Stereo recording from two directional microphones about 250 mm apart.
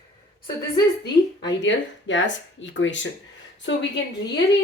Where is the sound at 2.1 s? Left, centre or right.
Left.